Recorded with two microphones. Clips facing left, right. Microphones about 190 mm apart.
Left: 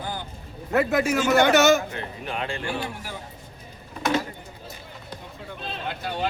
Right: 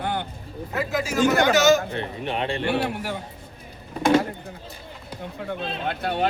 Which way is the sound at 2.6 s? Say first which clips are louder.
Right 6 dB; 65° right (ahead or behind).